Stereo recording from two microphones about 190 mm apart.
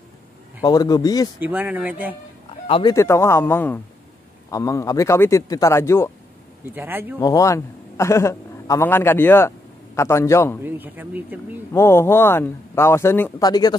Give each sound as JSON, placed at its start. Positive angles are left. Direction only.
{"t": 0.6, "sound": "a man's voice", "side_deg": 20}
{"t": 1.4, "sound": "speech", "side_deg": -10}
{"t": 2.7, "sound": "a man's voice", "side_deg": 20}
{"t": 6.7, "sound": "speech", "side_deg": -10}
{"t": 7.2, "sound": "a man's voice", "side_deg": 20}
{"t": 10.6, "sound": "speech", "side_deg": -10}
{"t": 11.7, "sound": "a man's voice", "side_deg": 15}